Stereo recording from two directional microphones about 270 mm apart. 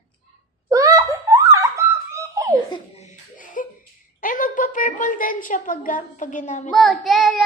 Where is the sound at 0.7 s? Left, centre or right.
Centre.